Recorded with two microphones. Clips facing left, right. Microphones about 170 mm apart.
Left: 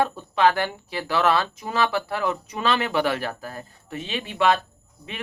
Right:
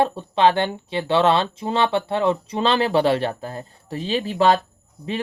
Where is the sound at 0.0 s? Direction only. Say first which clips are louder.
Right 3 dB; 30° right (ahead or behind).